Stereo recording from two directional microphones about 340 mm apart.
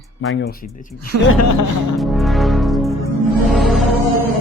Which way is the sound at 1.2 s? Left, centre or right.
Left.